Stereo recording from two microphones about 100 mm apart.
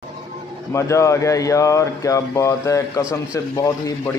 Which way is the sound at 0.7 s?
30° left (ahead or behind).